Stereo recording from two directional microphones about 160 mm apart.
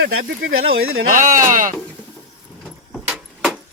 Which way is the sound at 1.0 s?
55° right (ahead or behind).